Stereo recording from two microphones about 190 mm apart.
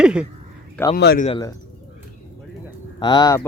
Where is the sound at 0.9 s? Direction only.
60° left (ahead or behind).